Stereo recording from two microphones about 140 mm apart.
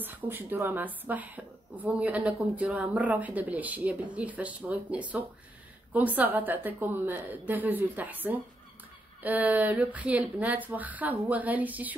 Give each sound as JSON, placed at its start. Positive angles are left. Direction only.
{"t": 0.0, "sound": "a woman's voice", "side_deg": -15}